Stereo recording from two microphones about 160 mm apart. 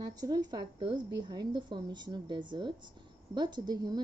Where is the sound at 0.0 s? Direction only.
25° right (ahead or behind).